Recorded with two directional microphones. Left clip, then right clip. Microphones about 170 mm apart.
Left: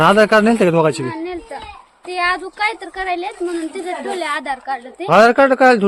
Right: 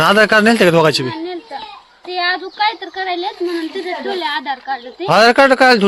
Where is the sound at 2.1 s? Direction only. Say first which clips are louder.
Even; 35° left (ahead or behind).